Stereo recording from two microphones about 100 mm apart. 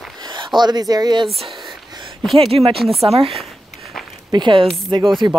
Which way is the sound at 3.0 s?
85° right.